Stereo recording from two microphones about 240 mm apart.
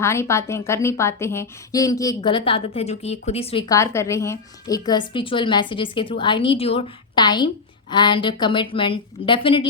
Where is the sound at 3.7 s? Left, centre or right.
Centre.